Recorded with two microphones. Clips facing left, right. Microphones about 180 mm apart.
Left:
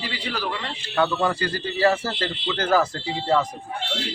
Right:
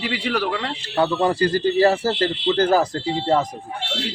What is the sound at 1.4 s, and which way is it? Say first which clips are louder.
Speech: right 5 dB; 40° right (ahead or behind).